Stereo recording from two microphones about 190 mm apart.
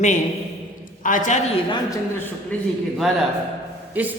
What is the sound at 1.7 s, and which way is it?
Speech, 15° left (ahead or behind).